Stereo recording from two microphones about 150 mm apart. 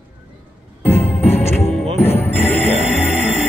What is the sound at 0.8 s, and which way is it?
Music, 15° left (ahead or behind).